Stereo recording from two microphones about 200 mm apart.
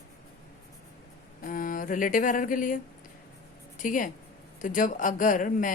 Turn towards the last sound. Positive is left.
turn(degrees=40)  # may be behind; listen again after turning